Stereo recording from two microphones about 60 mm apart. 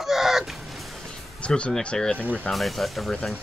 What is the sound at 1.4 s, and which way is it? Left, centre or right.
Speech, centre.